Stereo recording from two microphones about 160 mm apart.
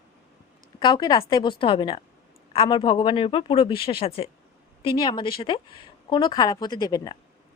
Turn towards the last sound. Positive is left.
turn(degrees=25)  # may be behind; listen again after turning